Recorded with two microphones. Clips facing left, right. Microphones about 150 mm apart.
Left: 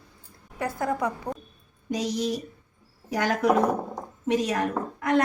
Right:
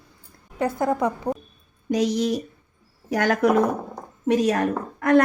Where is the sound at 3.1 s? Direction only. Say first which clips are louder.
Right 3 dB; 60° right (ahead or behind).